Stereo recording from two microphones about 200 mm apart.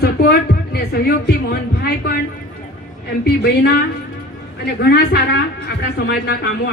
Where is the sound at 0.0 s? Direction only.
50° left (ahead or behind).